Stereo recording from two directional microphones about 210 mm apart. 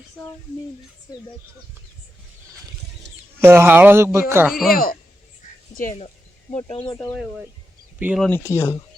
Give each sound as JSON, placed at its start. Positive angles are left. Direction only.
{"t": 3.4, "sound": "speech", "side_deg": -10}
{"t": 4.7, "sound": "speech", "side_deg": 45}
{"t": 6.5, "sound": "speech", "side_deg": 30}
{"t": 6.9, "sound": "speech", "side_deg": 10}
{"t": 7.2, "sound": "speech", "side_deg": -5}
{"t": 8.2, "sound": "speech", "side_deg": 10}